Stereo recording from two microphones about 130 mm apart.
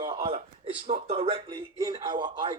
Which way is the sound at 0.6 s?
45° right (ahead or behind).